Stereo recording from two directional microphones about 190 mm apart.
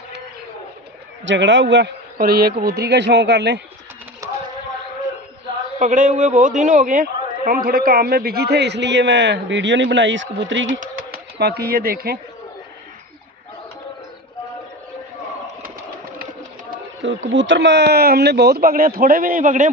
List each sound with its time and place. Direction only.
1.2 s a man's voice: 75° right (ahead or behind)
2.1 s a man's voice: 50° right (ahead or behind)
5.8 s a man's voice: 45° right (ahead or behind); by 10.7 s 75° right (ahead or behind)
10.7 s bird: 45° right (ahead or behind)
11.3 s speech: 55° right (ahead or behind)
17.3 s a man's voice: 75° right (ahead or behind); by 19.7 s 40° right (ahead or behind)